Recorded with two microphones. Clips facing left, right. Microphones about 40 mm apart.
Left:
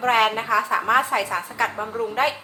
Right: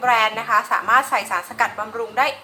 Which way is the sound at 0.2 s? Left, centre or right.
Right.